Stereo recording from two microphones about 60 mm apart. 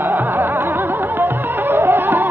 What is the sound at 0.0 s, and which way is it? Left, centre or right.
Music, right.